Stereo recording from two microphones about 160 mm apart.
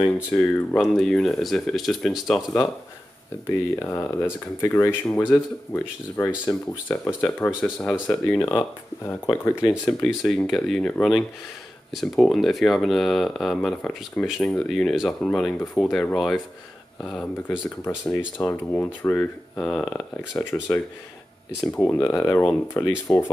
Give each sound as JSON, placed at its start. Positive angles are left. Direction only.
{"t": 0.3, "sound": "speech", "side_deg": 0}
{"t": 3.4, "sound": "speech", "side_deg": 15}
{"t": 7.9, "sound": "speech", "side_deg": 0}
{"t": 8.4, "sound": "speech", "side_deg": 20}
{"t": 10.2, "sound": "speech", "side_deg": 0}
{"t": 22.1, "sound": "speech", "side_deg": 20}